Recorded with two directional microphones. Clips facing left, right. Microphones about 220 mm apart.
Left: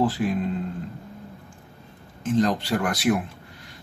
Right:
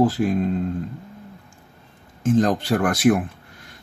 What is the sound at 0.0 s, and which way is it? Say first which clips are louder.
Speech: right 4 dB; 45° right (ahead or behind).